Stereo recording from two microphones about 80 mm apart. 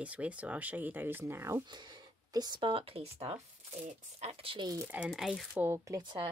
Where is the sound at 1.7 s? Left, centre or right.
Right.